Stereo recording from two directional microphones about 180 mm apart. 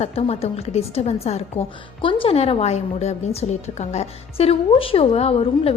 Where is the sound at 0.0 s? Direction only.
35° left (ahead or behind).